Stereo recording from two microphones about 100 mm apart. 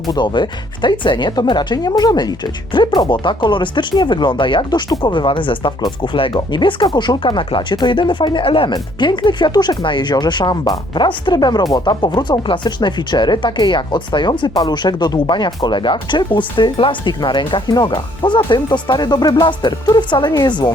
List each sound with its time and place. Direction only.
0.1 s speech: 50° left (ahead or behind)